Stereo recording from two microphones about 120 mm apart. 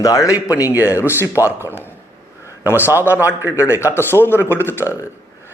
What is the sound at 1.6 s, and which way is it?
Speech, 20° right (ahead or behind).